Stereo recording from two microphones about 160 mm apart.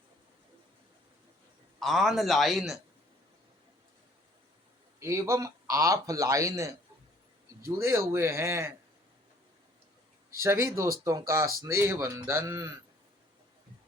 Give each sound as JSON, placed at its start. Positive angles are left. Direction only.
{"t": 1.8, "sound": "a man's voice", "side_deg": 0}
{"t": 4.9, "sound": "a man's voice", "side_deg": -15}
{"t": 10.3, "sound": "speech", "side_deg": -15}